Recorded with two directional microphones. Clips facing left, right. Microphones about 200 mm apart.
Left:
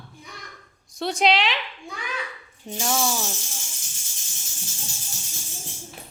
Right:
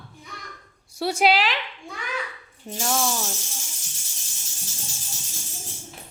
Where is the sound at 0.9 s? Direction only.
10° right (ahead or behind).